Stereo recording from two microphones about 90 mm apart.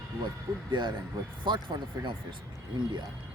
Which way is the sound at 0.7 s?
60° right (ahead or behind).